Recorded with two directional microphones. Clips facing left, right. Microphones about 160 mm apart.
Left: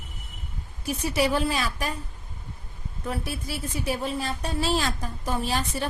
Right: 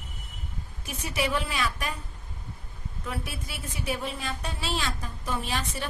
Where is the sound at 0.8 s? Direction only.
35° left (ahead or behind).